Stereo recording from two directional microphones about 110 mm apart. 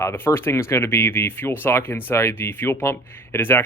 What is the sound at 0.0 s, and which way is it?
Speech, 25° left (ahead or behind).